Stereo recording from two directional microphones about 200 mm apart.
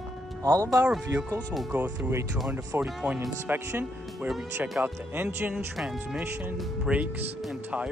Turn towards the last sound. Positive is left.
turn(degrees=-5)  # may be behind; listen again after turning